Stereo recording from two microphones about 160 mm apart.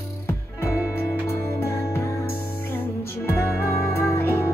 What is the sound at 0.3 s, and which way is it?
Music, 15° left (ahead or behind).